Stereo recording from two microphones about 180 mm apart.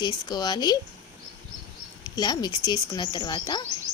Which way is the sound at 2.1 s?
20° left (ahead or behind).